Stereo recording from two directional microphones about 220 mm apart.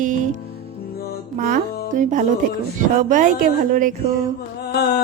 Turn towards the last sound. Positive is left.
turn(degrees=45)  # may be behind; listen again after turning